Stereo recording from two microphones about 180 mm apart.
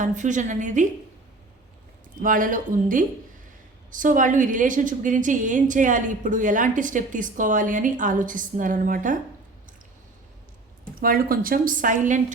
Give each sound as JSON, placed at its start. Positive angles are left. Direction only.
{"t": 0.0, "sound": "a woman's voice", "side_deg": -45}
{"t": 2.2, "sound": "a woman's voice", "side_deg": -50}
{"t": 11.0, "sound": "a woman's voice", "side_deg": -55}